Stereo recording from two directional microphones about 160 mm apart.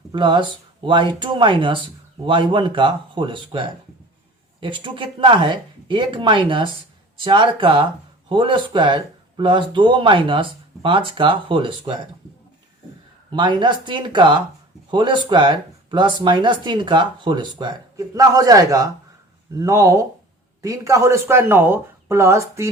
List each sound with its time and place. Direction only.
0.1 s speech: 30° right (ahead or behind)
13.3 s speech: 30° right (ahead or behind)